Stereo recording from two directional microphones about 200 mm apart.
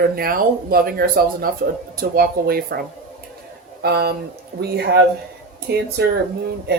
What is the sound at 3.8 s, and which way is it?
Speech, 50° right (ahead or behind).